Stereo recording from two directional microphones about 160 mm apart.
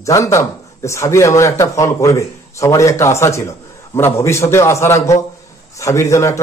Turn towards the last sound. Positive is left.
turn(degrees=20)  # may be behind; listen again after turning